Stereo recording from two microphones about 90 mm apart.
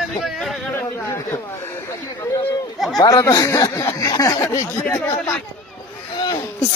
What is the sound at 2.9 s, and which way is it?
Speech, 40° left (ahead or behind).